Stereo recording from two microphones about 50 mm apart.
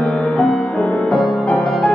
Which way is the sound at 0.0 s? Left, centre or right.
Centre.